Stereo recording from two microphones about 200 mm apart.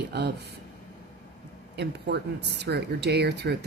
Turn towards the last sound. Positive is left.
turn(degrees=-55)  # may be behind; listen again after turning